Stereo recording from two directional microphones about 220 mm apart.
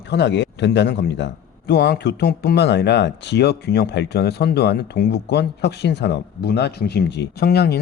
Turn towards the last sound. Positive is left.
turn(degrees=45)  # may be behind; listen again after turning